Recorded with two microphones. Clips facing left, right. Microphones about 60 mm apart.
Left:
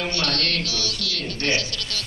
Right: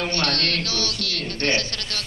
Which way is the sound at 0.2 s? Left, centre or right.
Right.